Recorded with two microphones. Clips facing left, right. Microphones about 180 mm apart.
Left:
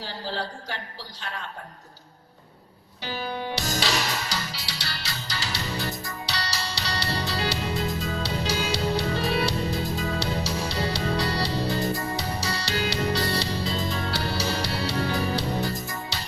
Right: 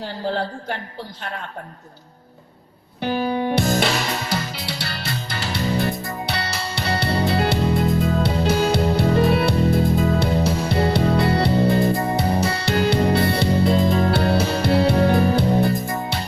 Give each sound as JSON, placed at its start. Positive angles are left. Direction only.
{"t": 0.3, "sound": "a woman's voice", "side_deg": -55}
{"t": 3.0, "sound": "music", "side_deg": -55}